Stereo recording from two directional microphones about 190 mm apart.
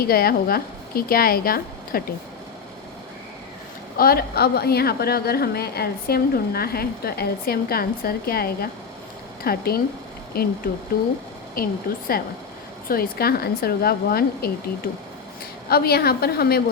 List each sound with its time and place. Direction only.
0.0 s a woman's voice: 50° left (ahead or behind)
3.9 s a woman's voice: 50° left (ahead or behind)
11.6 s a woman's voice: 50° left (ahead or behind)
15.7 s a woman's voice: 55° left (ahead or behind)